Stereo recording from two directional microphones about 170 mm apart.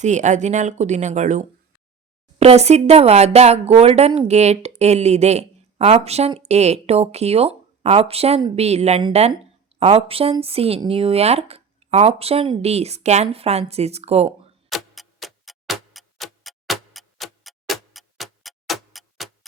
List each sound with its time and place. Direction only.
0.0 s speech: 45° right (ahead or behind)
14.7 s tick-tock: centre (ahead or behind)